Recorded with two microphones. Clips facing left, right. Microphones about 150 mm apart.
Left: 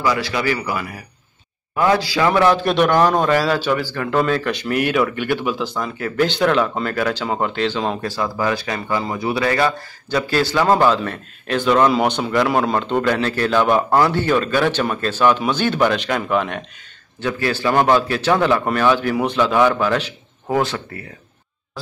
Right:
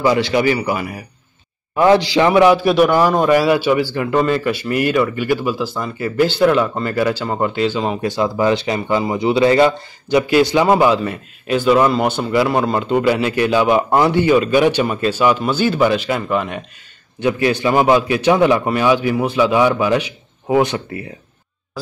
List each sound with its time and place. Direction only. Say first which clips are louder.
0.0 s a man's voice: right 5 dB; 25° right (ahead or behind); by 8.0 s 5° right (ahead or behind)
8.0 s a man's voice: right 5 dB; 20° right (ahead or behind); by 16.6 s centre (ahead or behind)
17.2 s a man's voice: right 5 dB; 15° right (ahead or behind)